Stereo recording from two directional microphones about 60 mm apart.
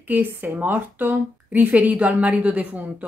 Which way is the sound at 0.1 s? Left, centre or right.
Right.